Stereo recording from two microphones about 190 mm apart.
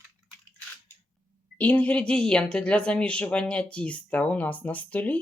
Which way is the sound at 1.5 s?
10° left (ahead or behind).